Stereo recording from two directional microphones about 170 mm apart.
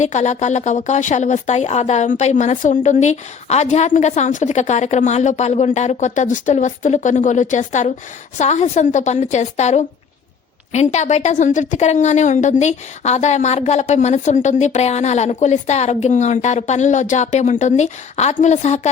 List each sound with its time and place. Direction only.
0.0 s a woman's voice: 45° left (ahead or behind)